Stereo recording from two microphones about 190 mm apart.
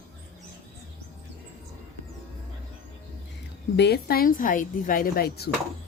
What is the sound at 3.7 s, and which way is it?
Speech, 60° left (ahead or behind).